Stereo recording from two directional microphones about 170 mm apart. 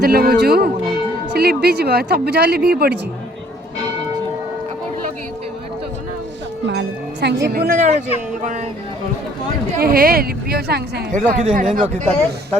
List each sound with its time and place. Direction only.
0.0 s a woman's voice: 60° right (ahead or behind)
6.7 s speech: 80° right; by 7.9 s 50° right (ahead or behind)
9.7 s a woman's voice: 60° right (ahead or behind)
11.1 s speech: 45° right (ahead or behind)